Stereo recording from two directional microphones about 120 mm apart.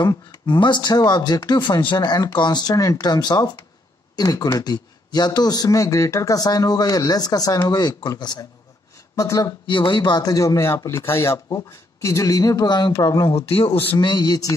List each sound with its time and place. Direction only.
0.0 s speech: 40° left (ahead or behind)
9.7 s speech: 40° left (ahead or behind)
13.9 s speech: 35° left (ahead or behind)